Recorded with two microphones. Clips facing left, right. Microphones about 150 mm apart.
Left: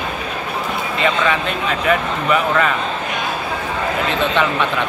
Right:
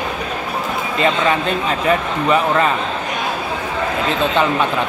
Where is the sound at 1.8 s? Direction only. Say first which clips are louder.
Right 1 dB; 30° right (ahead or behind).